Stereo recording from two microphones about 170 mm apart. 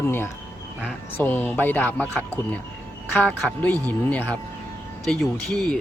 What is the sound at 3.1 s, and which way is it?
Speech, 10° left (ahead or behind).